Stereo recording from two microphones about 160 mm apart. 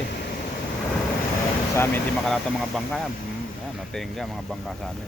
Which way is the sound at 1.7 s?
15° left (ahead or behind).